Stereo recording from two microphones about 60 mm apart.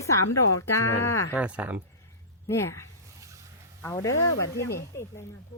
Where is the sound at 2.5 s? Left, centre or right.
Left.